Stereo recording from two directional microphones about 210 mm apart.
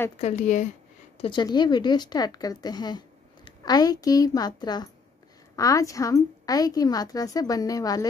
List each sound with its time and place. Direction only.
0.2 s speech: 35° left (ahead or behind)
1.1 s a woman's voice: 25° left (ahead or behind)